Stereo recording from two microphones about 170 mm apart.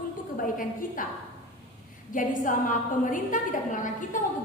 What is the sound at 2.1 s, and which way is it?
A woman's voice, 50° left (ahead or behind).